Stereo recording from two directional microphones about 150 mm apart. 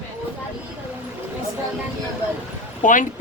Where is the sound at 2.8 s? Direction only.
60° left (ahead or behind).